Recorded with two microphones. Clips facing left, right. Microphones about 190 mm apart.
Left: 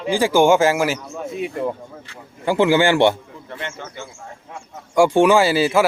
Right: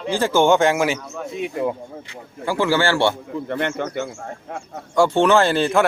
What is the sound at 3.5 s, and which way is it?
Speech, 60° right (ahead or behind).